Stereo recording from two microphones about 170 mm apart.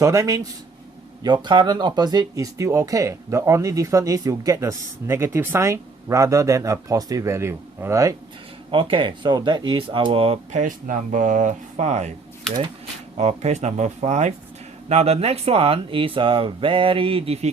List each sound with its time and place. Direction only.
0.0 s speech: 20° right (ahead or behind)
8.7 s speech: 30° right (ahead or behind)
10.6 s speech: 50° right (ahead or behind)
13.1 s speech: 40° right (ahead or behind)